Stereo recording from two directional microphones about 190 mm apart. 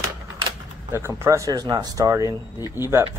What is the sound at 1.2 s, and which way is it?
Speech, 15° right (ahead or behind).